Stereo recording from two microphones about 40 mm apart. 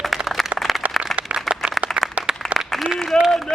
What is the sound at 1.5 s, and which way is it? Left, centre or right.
Applause, centre.